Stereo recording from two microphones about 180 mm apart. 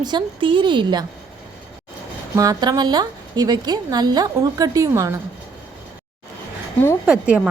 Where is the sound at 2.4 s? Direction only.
20° right (ahead or behind).